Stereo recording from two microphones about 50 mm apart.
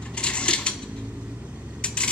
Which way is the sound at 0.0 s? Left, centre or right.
Left.